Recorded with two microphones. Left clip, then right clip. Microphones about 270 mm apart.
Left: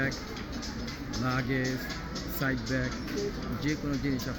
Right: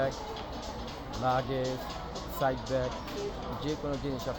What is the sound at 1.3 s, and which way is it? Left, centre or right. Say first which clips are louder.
Speech: even; right.